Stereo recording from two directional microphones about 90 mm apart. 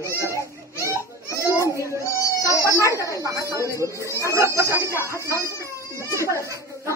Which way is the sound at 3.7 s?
35° right (ahead or behind).